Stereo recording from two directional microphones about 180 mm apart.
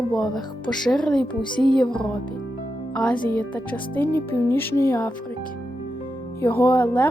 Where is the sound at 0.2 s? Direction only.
5° left (ahead or behind).